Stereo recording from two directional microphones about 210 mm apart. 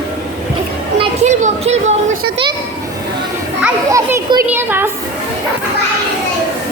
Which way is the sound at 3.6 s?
15° right (ahead or behind).